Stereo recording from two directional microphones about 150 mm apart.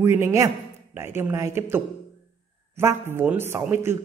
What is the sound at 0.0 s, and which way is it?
A man's voice, 20° right (ahead or behind).